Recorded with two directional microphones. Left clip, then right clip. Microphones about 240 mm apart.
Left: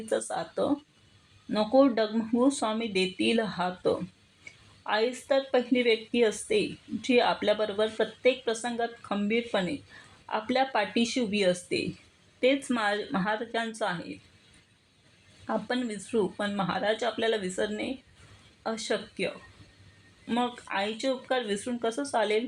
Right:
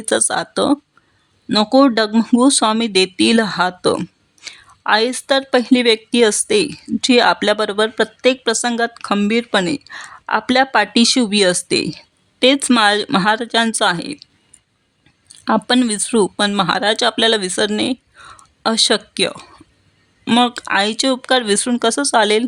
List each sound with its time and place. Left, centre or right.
0.0 s speech: right
15.4 s speech: right